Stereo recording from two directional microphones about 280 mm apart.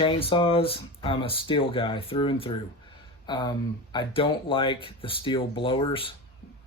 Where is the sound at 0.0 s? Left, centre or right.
Centre.